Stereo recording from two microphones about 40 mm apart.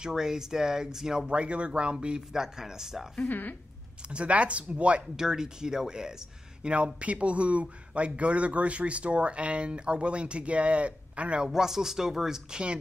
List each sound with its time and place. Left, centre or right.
0.0 s speech: centre
1.3 s speech: right; by 3.1 s centre
3.2 s speech: left
4.1 s speech: right
5.1 s speech: centre
6.7 s speech: right
11.4 s speech: centre